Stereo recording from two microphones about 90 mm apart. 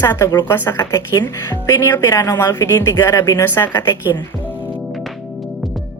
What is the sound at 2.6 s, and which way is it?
Speech, 30° left (ahead or behind).